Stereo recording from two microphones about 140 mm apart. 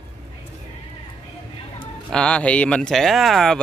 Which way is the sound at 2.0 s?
5° left (ahead or behind).